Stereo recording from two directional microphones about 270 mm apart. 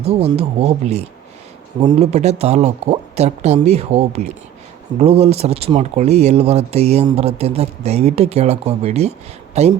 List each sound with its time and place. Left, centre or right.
0.1 s speech: right